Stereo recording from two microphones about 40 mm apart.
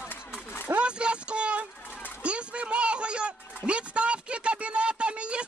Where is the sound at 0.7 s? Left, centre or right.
Right.